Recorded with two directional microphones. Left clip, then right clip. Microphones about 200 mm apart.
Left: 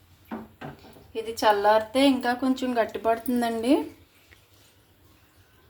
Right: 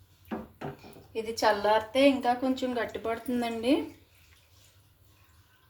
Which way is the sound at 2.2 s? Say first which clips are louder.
Left 2 dB; 35° left (ahead or behind).